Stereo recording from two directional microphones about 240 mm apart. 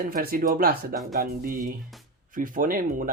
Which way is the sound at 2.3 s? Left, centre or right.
Right.